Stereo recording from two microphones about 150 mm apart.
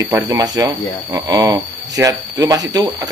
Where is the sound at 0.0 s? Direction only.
20° right (ahead or behind).